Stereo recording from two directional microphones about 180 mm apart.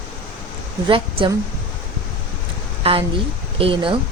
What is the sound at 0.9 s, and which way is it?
Speech, 30° right (ahead or behind).